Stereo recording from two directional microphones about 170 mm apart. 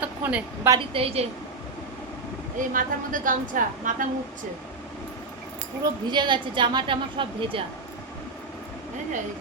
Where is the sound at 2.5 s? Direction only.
50° right (ahead or behind).